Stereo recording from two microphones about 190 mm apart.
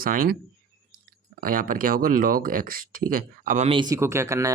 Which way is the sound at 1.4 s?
50° right (ahead or behind).